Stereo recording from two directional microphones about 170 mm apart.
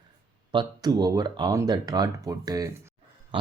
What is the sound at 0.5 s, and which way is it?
Speech, 25° right (ahead or behind).